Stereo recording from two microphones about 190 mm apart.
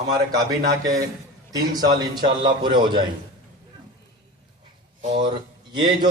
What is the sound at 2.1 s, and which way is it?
Speech, 25° right (ahead or behind).